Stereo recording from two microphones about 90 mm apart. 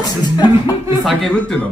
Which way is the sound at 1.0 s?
Centre (ahead or behind).